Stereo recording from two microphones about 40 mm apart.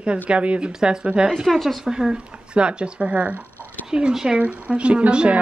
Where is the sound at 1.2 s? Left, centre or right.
Right.